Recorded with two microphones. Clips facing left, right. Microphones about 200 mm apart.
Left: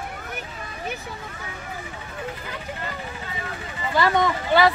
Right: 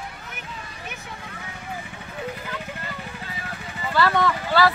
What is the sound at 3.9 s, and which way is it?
Speech, 15° left (ahead or behind).